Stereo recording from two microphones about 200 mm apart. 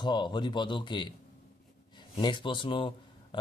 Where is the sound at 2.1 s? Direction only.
25° left (ahead or behind).